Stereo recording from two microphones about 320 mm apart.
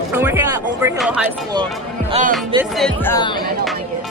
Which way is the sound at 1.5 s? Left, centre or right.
Centre.